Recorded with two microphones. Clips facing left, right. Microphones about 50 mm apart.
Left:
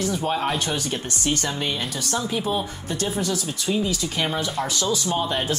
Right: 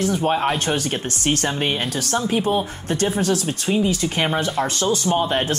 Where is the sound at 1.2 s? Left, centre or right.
Right.